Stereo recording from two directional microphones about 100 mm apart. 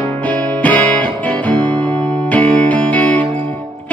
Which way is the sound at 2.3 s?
15° left (ahead or behind).